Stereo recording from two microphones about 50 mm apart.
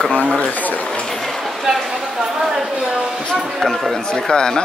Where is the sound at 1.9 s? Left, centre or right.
Centre.